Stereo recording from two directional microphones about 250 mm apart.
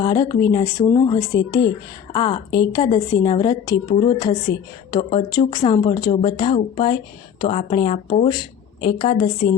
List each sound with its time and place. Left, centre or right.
0.0 s a woman's voice: centre